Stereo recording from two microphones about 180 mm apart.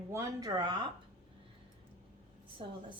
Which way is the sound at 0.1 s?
20° right (ahead or behind).